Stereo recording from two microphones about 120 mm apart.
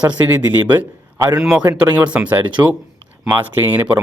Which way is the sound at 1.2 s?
35° right (ahead or behind).